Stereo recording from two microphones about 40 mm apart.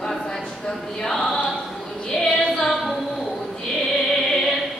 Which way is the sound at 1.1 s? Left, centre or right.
Centre.